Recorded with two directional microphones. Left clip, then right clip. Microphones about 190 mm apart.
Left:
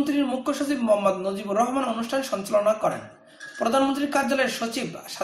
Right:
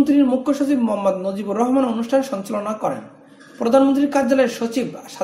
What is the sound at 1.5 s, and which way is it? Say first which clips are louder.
Speech: right 4 dB; 35° right (ahead or behind).